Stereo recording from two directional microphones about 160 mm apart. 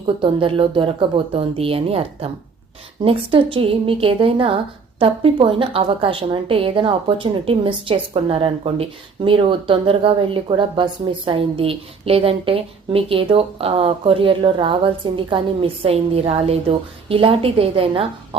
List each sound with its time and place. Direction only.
0.0 s a woman's voice: 30° right (ahead or behind)